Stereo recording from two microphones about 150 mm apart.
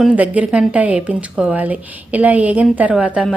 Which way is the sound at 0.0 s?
10° right (ahead or behind).